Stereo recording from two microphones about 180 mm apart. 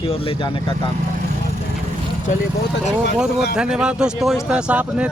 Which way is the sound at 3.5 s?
5° right (ahead or behind).